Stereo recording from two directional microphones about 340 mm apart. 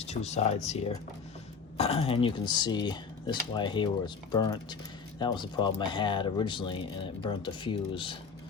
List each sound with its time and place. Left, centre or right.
0.0 s speech: centre